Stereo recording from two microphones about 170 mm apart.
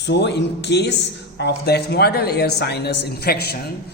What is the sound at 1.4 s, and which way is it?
A woman's voice, 75° left (ahead or behind).